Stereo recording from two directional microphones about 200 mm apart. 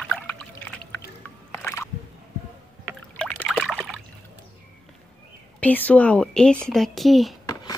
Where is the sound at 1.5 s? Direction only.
10° left (ahead or behind).